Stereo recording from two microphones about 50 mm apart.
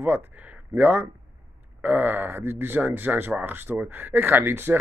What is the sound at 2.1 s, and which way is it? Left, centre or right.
Speech, right.